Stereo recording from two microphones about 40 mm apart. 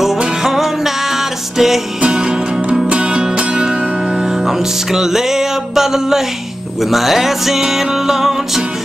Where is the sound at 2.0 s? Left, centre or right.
Right.